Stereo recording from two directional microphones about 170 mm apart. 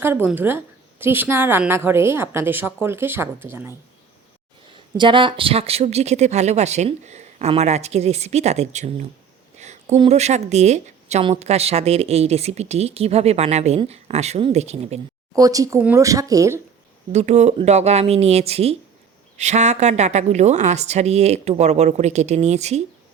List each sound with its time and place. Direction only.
0.0 s a woman's voice: 15° right (ahead or behind)
4.9 s speech: 30° right (ahead or behind)
9.6 s a sound: 40° right (ahead or behind)
10.1 s speech: 40° right (ahead or behind)
15.4 s speech: 20° right (ahead or behind)
17.1 s speech: 40° right (ahead or behind)